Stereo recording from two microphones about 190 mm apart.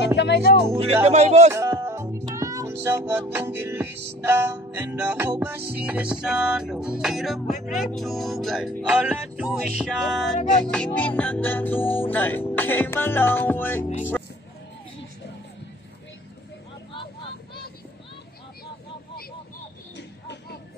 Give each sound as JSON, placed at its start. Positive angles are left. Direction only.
{"t": 0.5, "sound": "speech", "side_deg": 55}
{"t": 1.0, "sound": "speech", "side_deg": -35}
{"t": 1.5, "sound": "music", "side_deg": -15}
{"t": 6.2, "sound": "speech", "side_deg": -5}
{"t": 16.9, "sound": "vehicle", "side_deg": 25}